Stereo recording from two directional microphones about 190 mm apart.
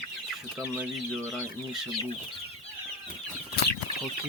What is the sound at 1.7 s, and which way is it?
Chicken, centre (ahead or behind).